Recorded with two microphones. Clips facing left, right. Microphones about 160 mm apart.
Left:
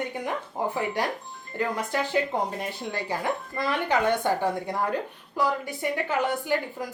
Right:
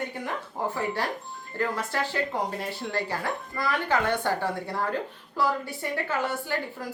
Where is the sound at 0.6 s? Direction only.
15° left (ahead or behind).